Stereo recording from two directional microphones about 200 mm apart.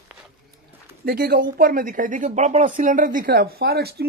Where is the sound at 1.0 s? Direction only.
50° right (ahead or behind).